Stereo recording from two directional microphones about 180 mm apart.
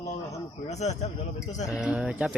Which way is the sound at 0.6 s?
40° left (ahead or behind).